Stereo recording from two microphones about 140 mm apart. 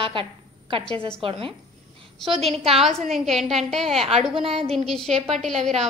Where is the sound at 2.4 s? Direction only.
45° right (ahead or behind).